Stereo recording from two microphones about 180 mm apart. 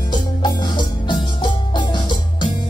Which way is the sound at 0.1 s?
25° left (ahead or behind).